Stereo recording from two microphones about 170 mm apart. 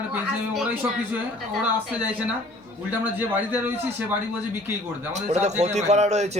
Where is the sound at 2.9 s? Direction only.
10° right (ahead or behind).